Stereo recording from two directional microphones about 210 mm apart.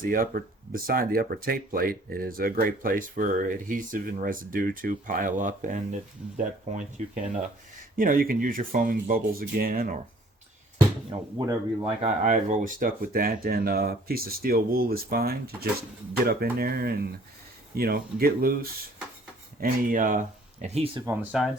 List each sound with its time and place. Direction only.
0.0 s speech: 40° right (ahead or behind)
11.3 s speech: 20° right (ahead or behind)
12.0 s speech: 35° right (ahead or behind)
21.0 s speech: 5° right (ahead or behind)